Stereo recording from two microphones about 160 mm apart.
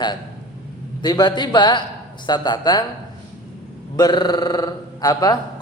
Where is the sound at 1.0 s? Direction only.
25° left (ahead or behind).